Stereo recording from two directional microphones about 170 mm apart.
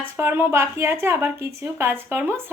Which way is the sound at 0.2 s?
15° right (ahead or behind).